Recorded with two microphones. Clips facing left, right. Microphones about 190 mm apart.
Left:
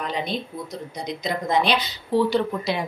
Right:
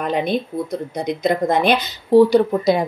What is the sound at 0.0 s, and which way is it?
Speech, 55° right (ahead or behind).